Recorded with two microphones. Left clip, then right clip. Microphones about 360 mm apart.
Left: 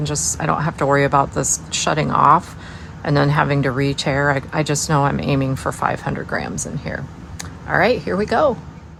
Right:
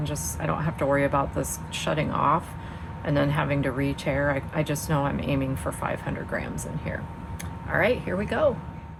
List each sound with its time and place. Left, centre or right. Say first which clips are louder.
0.0 s speech: left 9 dB; left
7.7 s speech: left 7 dB; left